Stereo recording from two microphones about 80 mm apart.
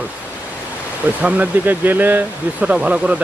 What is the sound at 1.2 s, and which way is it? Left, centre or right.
Speech, centre.